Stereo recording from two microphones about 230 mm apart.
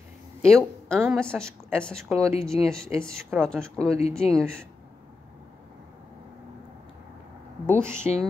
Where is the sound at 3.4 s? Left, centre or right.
Centre.